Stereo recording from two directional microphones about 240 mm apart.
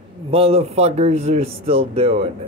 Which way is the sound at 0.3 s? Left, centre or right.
Right.